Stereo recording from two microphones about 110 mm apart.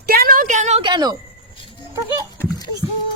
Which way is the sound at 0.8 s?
40° right (ahead or behind).